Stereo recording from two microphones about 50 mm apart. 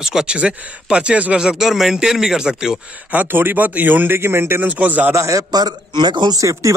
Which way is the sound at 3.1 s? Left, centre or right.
Right.